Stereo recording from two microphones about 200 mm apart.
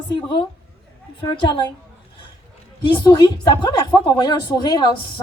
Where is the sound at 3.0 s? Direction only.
20° left (ahead or behind).